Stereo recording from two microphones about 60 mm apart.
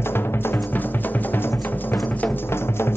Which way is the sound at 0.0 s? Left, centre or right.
Left.